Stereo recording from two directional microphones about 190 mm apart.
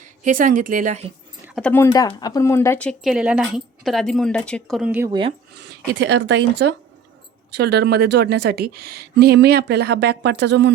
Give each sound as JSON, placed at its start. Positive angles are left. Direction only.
{"t": 0.3, "sound": "a woman's voice", "side_deg": -45}
{"t": 1.6, "sound": "speech", "side_deg": 15}
{"t": 5.0, "sound": "speech", "side_deg": -25}
{"t": 6.0, "sound": "a woman's voice", "side_deg": -70}